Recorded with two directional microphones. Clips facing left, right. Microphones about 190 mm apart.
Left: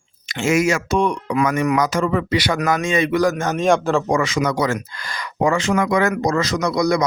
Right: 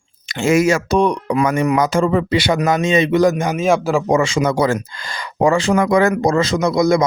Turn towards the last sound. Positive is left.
turn(degrees=-25)  # may be behind; listen again after turning